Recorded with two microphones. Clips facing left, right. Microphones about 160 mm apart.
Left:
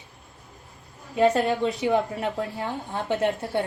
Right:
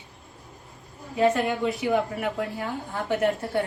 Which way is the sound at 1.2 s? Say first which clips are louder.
Left 2 dB; 35° left (ahead or behind).